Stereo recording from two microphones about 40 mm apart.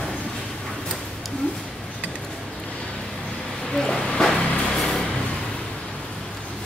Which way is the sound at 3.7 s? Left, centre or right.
Centre.